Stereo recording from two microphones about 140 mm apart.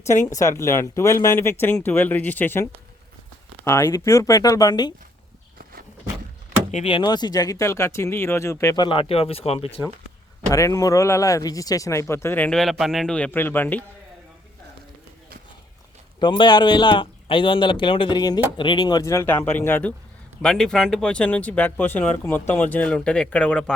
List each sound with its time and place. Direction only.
0.0 s speech: 20° left (ahead or behind)
6.8 s speech: 35° left (ahead or behind)
10.5 s speech: 25° left (ahead or behind)
16.2 s a man's voice: 30° left (ahead or behind); by 23.7 s 10° left (ahead or behind)